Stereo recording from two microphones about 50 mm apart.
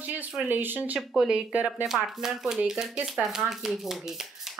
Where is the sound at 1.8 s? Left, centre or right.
Centre.